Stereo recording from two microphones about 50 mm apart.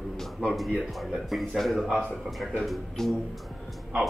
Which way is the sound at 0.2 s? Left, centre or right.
Centre.